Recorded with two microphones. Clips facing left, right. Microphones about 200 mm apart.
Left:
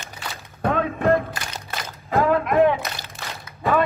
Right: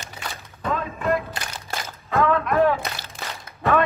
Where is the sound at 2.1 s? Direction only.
30° left (ahead or behind).